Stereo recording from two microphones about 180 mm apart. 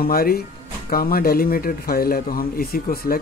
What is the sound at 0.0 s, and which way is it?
Speech, 55° left (ahead or behind).